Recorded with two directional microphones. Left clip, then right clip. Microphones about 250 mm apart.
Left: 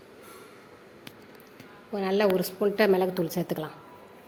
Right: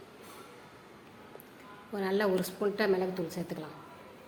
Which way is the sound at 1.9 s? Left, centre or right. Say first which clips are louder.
Left 5 dB; centre.